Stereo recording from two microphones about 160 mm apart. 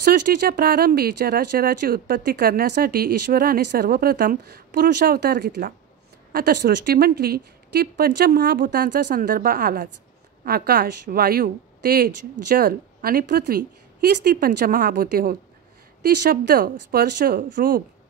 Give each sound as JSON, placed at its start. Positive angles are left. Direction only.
{"t": 0.0, "sound": "speech", "side_deg": -85}
{"t": 6.3, "sound": "speech", "side_deg": -85}